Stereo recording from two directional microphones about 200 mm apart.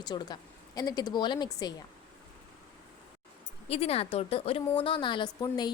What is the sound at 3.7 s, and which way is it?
A woman's voice, 30° left (ahead or behind).